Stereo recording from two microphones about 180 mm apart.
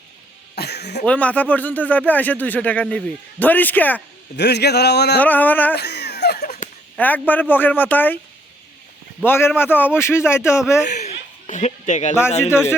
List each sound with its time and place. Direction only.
0.5 s cough: 65° left (ahead or behind)
1.0 s speech: 5° left (ahead or behind)
4.4 s a man's voice: 65° left (ahead or behind)
5.2 s speech: 10° left (ahead or behind)
5.7 s a sound: 65° left (ahead or behind)
6.9 s speech: 10° left (ahead or behind)
9.2 s speech: 10° left (ahead or behind)
10.8 s a sound: 40° left (ahead or behind)
12.5 s speech: 15° left (ahead or behind)